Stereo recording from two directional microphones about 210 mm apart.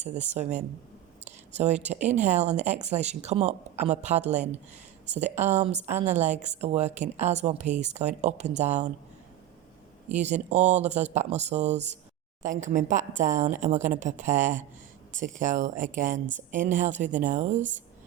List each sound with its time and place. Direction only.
0.0 s speech: 35° right (ahead or behind)
10.1 s speech: 35° right (ahead or behind)